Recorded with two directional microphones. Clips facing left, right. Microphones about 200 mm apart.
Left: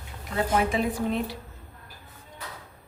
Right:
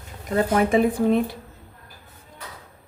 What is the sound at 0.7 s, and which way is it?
Speech, 50° right (ahead or behind).